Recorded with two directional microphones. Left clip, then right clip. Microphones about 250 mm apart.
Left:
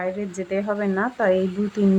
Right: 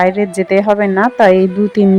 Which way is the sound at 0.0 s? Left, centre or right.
Right.